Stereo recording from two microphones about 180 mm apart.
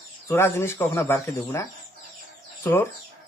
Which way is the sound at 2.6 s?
15° left (ahead or behind).